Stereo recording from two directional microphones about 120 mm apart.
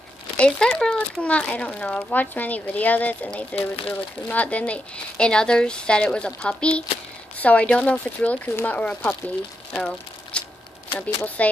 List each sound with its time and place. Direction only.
0.4 s speech: 5° left (ahead or behind)
3.5 s speech: 50° left (ahead or behind)
3.9 s speech: 10° left (ahead or behind)
9.8 s a sound: 5° left (ahead or behind)
11.2 s speech: 10° left (ahead or behind)